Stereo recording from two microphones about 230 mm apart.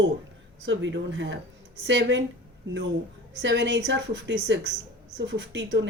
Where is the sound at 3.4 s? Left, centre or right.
Right.